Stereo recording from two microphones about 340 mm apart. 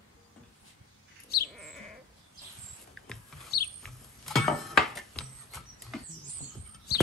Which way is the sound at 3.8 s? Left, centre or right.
Centre.